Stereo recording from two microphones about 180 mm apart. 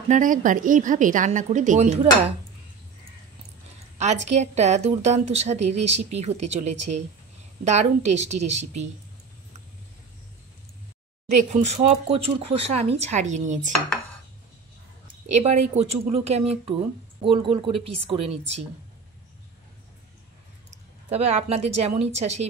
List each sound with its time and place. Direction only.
0.1 s a woman's voice: 45° right (ahead or behind)
4.0 s a woman's voice: 40° right (ahead or behind)
11.5 s a woman's voice: 35° right (ahead or behind)
15.4 s a woman's voice: 35° right (ahead or behind)
21.1 s a woman's voice: 35° right (ahead or behind)